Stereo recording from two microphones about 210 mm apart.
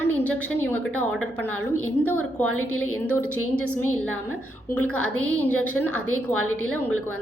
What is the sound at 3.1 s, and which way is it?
Speech, 90° left.